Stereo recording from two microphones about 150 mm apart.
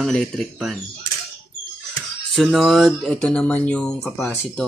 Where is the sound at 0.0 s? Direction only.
Centre (ahead or behind).